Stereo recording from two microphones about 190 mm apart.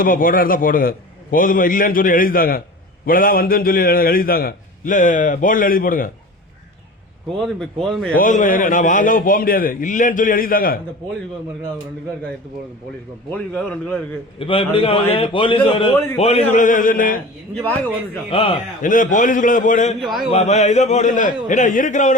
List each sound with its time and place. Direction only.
0.0 s a man's voice: 45° left (ahead or behind)
7.3 s speech: centre (ahead or behind)
8.1 s a man's voice: 45° left (ahead or behind)
13.3 s speech: 5° left (ahead or behind)
14.3 s a man's voice: 30° left (ahead or behind); by 17.2 s 45° left (ahead or behind)
18.3 s speech: 30° left (ahead or behind)
18.8 s a man's voice: 45° left (ahead or behind)